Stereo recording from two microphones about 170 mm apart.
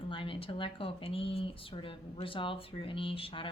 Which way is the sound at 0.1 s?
30° left (ahead or behind).